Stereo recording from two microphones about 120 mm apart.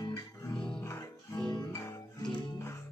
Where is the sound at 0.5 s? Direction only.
5° left (ahead or behind).